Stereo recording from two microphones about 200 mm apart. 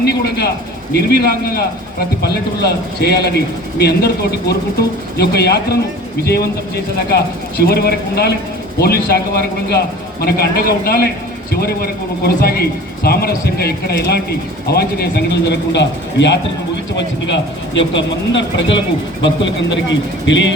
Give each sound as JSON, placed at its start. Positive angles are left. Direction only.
{"t": 0.0, "sound": "a man's voice", "side_deg": 55}